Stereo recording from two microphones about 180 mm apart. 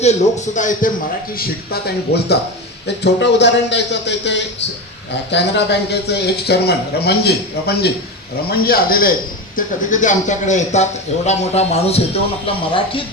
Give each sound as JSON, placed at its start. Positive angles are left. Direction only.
{"t": 0.0, "sound": "a man's voice", "side_deg": 40}
{"t": 2.1, "sound": "a man's voice", "side_deg": 65}